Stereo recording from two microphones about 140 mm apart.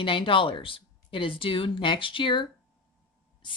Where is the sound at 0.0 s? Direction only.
40° left (ahead or behind).